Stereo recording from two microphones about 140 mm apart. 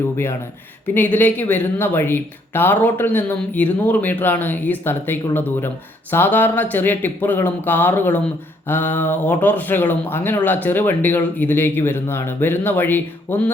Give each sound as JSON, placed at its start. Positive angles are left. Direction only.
{"t": 0.9, "sound": "speech", "side_deg": 10}